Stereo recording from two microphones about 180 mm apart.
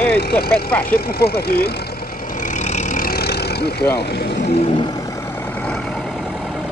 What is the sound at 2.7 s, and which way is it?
Vehicle, 50° left (ahead or behind).